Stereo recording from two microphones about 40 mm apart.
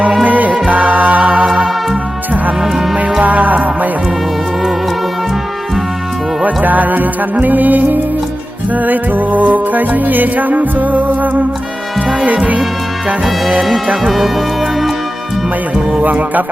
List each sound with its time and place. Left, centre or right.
0.3 s music: right
3.2 s music: right
6.4 s music: right
13.6 s music: centre
15.7 s music: centre
16.0 s music: right